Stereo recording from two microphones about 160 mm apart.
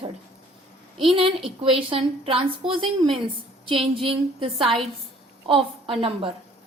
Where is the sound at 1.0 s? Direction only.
35° right (ahead or behind).